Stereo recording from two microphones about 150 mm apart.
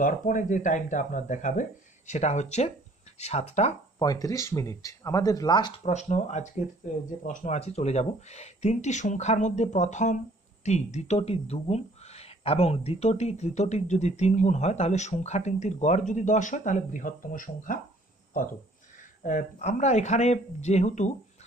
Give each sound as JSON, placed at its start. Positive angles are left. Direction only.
{"t": 0.0, "sound": "speech", "side_deg": 60}
{"t": 4.0, "sound": "speech", "side_deg": 25}
{"t": 5.9, "sound": "speech", "side_deg": 50}
{"t": 19.2, "sound": "speech", "side_deg": 60}